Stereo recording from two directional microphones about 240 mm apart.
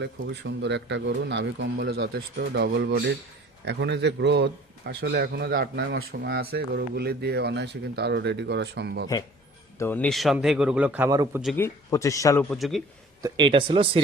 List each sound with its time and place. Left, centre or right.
0.0 s a man's voice: right
9.7 s a man's voice: centre
11.5 s speech: centre
13.2 s speech: centre